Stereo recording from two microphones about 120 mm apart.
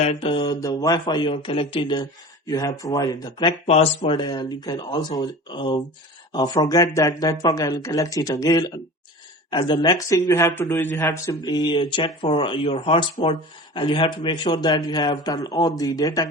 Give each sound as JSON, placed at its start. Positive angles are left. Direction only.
{"t": 0.0, "sound": "speech", "side_deg": 60}
{"t": 0.6, "sound": "a man's voice", "side_deg": 30}
{"t": 2.5, "sound": "a man's voice", "side_deg": 30}
{"t": 3.7, "sound": "a man's voice", "side_deg": 50}
{"t": 11.4, "sound": "a man's voice", "side_deg": 40}